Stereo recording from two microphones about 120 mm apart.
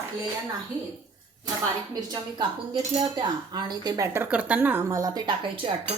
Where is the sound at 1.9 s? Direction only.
35° right (ahead or behind).